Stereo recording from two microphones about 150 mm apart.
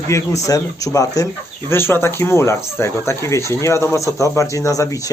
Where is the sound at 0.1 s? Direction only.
20° left (ahead or behind).